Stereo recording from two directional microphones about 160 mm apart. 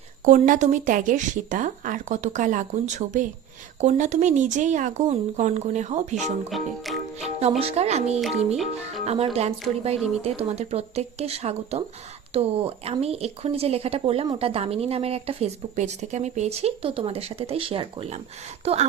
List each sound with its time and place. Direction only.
0.3 s speech: 55° right (ahead or behind)
6.5 s music: centre (ahead or behind)
7.6 s speech: 40° right (ahead or behind)